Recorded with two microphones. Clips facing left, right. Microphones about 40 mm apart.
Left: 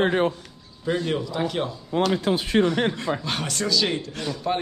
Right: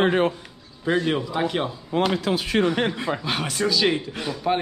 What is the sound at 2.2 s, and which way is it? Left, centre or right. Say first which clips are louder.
Speech: left 1 dB; right.